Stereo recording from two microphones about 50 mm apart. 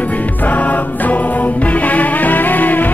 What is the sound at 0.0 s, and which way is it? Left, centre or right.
Music, left.